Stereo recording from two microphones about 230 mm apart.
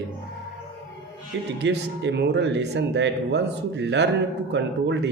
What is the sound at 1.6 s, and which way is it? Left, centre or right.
A man's voice, right.